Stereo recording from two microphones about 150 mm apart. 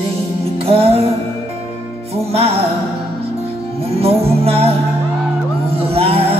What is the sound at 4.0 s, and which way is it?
Music, 40° right (ahead or behind).